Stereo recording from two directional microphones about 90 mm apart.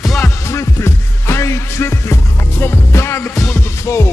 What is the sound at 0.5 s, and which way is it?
Music, 30° left (ahead or behind).